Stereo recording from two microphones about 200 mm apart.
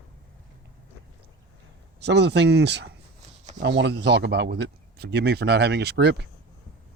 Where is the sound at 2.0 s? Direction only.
60° right (ahead or behind).